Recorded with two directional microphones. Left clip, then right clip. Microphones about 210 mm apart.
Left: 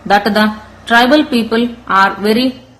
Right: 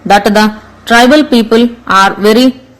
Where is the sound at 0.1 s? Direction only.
25° right (ahead or behind).